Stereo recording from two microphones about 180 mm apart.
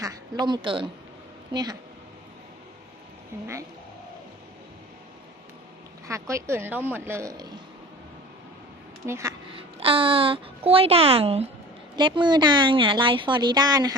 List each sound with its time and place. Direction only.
0.0 s a woman's voice: 20° right (ahead or behind)
3.3 s speech: 15° right (ahead or behind)
6.1 s speech: 15° right (ahead or behind)
9.0 s speech: 15° right (ahead or behind)
9.6 s a woman's voice: 30° right (ahead or behind)